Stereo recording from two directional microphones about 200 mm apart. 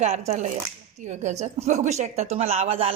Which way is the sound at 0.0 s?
35° right (ahead or behind).